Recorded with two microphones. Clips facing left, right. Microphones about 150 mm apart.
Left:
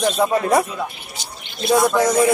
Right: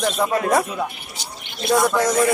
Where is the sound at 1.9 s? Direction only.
15° left (ahead or behind).